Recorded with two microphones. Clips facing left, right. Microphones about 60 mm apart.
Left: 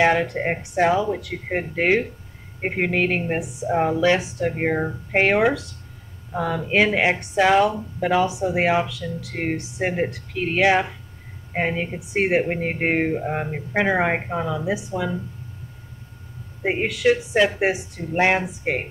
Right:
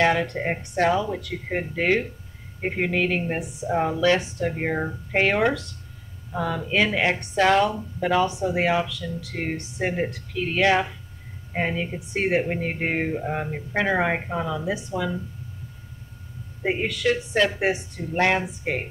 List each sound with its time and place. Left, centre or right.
0.0 s speech: centre
16.6 s speech: centre